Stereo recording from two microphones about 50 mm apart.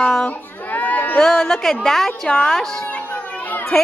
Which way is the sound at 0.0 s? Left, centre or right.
Centre.